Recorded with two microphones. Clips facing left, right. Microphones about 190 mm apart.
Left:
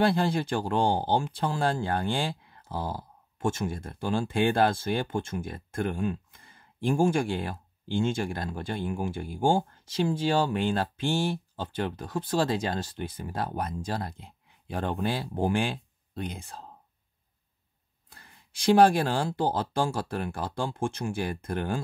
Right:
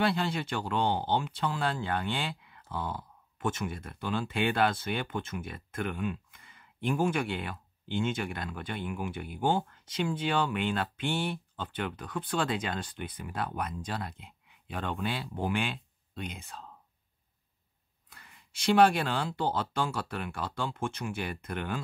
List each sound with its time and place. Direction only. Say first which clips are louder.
0.0 s speech: left 5 dB; 45° left (ahead or behind)
18.8 s speech: left 2 dB; 35° left (ahead or behind)